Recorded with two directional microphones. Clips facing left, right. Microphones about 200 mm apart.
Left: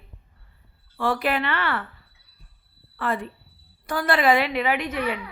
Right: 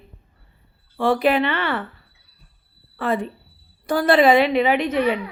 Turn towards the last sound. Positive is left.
turn(degrees=-20)  # may be behind; listen again after turning